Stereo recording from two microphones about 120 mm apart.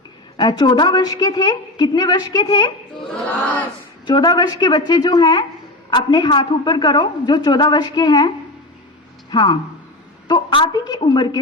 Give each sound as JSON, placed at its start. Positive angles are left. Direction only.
{"t": 0.3, "sound": "a woman's voice", "side_deg": 40}
{"t": 4.0, "sound": "a woman's voice", "side_deg": 35}
{"t": 9.3, "sound": "a woman's voice", "side_deg": 40}